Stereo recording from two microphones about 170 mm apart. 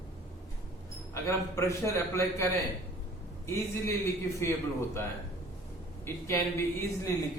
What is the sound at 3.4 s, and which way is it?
A man's voice, 15° left (ahead or behind).